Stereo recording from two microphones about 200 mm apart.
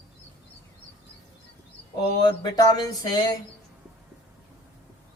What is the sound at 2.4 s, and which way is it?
Speech, 20° left (ahead or behind).